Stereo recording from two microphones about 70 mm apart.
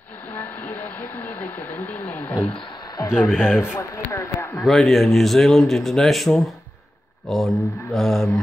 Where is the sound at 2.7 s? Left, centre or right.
Left.